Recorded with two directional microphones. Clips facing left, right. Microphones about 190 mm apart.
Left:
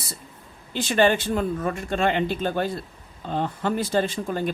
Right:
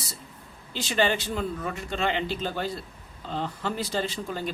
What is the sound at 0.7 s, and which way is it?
Speech, 55° left (ahead or behind).